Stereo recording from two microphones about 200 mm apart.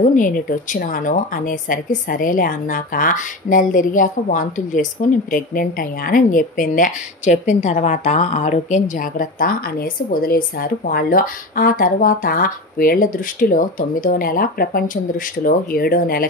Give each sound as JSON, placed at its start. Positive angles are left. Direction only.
{"t": 0.0, "sound": "a woman's voice", "side_deg": 40}